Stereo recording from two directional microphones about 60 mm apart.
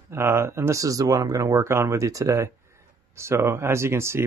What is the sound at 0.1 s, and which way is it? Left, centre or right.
Speech, right.